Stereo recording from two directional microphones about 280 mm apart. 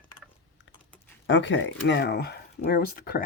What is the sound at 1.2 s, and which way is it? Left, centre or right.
Speech, left.